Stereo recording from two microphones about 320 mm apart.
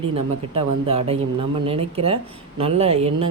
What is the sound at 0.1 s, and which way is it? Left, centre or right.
Speech, centre.